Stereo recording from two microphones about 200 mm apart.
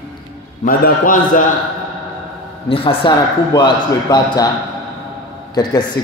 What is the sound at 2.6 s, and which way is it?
Speech, 30° left (ahead or behind).